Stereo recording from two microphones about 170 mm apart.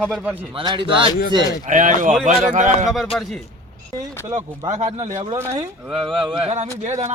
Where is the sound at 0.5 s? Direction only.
30° right (ahead or behind).